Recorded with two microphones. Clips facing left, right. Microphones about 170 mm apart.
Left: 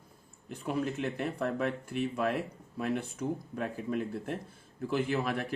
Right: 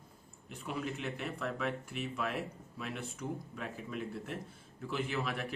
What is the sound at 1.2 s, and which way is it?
Speech, 40° left (ahead or behind).